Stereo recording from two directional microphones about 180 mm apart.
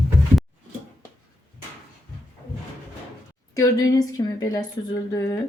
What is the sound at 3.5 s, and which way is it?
A woman's voice, 20° left (ahead or behind).